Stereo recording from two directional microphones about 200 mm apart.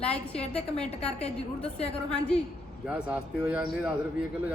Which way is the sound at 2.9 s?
5° right (ahead or behind).